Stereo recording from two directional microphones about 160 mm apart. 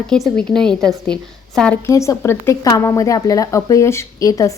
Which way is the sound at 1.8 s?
20° left (ahead or behind).